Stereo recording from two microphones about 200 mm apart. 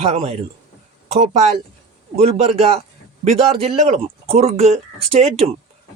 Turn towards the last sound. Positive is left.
turn(degrees=-30)  # may be behind; listen again after turning